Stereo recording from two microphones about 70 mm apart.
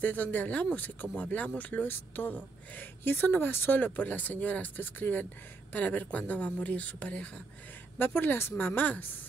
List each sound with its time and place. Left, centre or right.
0.0 s speech: left